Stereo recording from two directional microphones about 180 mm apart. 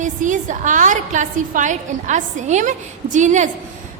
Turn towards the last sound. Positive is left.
turn(degrees=-40)  # may be behind; listen again after turning